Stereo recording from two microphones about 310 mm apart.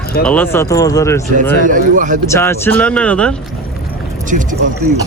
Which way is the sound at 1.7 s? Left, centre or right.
Right.